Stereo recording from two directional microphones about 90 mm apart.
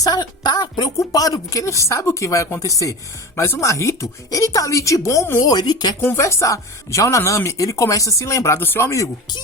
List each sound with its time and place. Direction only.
0.0 s a woman's voice: 45° left (ahead or behind)
0.9 s speech: 40° left (ahead or behind)
5.4 s a woman's voice: 50° left (ahead or behind)
6.0 s speech: 30° left (ahead or behind)
8.5 s speech: 25° left (ahead or behind)